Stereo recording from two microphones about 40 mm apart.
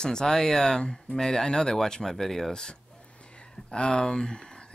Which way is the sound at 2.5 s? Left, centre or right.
Centre.